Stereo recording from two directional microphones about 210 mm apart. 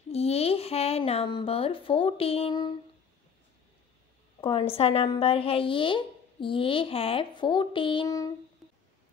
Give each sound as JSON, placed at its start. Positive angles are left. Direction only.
{"t": 0.1, "sound": "speech", "side_deg": 30}
{"t": 4.4, "sound": "a woman's voice", "side_deg": 25}